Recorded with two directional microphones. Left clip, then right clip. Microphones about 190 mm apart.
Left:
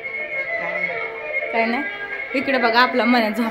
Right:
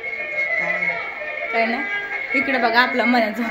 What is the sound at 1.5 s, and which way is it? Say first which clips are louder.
Speech: right 1 dB; 25° left (ahead or behind).